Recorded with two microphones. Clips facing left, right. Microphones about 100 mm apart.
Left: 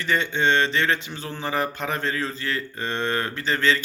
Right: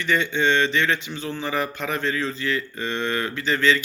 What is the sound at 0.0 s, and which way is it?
Speech, 40° left (ahead or behind).